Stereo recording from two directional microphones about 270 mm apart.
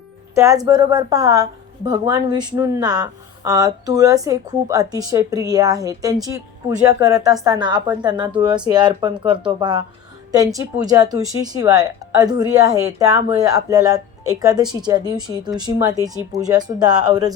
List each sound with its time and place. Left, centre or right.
0.3 s a woman's voice: centre